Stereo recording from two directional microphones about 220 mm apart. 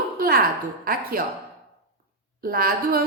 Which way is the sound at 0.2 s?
40° right (ahead or behind).